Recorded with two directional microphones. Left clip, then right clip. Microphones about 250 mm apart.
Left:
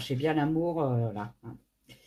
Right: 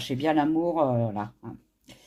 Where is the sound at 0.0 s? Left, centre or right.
Right.